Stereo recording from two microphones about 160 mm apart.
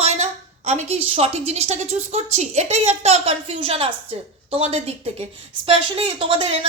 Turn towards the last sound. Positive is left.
turn(degrees=-35)  # may be behind; listen again after turning